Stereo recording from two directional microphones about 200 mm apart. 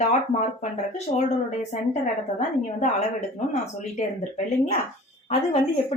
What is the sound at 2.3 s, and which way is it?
Speech, 35° left (ahead or behind).